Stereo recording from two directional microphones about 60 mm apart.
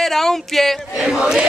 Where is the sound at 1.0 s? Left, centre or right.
Centre.